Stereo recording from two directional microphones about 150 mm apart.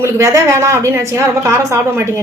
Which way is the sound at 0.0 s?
20° right (ahead or behind).